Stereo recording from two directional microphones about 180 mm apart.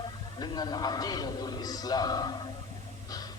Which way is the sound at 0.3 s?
20° left (ahead or behind).